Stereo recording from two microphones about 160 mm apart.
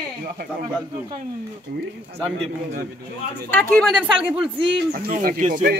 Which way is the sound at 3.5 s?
10° left (ahead or behind).